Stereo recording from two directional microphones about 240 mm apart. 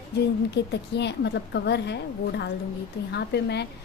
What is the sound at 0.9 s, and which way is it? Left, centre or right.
A woman's voice, left.